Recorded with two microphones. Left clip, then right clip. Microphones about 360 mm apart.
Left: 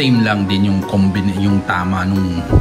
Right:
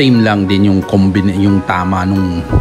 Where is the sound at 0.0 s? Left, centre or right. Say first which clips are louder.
Right 4 dB; centre.